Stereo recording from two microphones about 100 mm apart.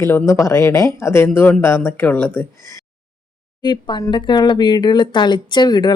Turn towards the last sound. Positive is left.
turn(degrees=45)  # may be behind; listen again after turning